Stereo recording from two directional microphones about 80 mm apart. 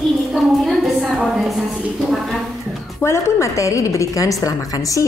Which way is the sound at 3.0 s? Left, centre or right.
Left.